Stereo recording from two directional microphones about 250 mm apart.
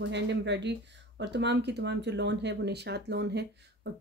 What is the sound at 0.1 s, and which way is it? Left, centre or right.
Speech, right.